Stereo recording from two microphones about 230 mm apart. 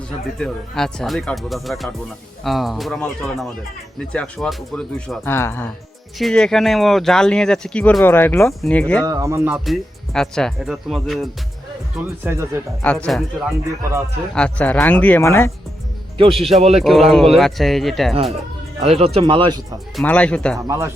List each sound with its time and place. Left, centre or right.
0.3 s speech: centre
9.0 s speech: centre
9.6 s speech: centre
12.2 s speech: centre
12.8 s speech: centre
16.5 s speech: right
16.8 s speech: centre
18.8 s speech: right
20.0 s speech: centre
20.7 s speech: centre